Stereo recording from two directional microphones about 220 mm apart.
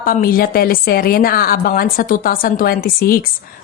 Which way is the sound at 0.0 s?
40° left (ahead or behind).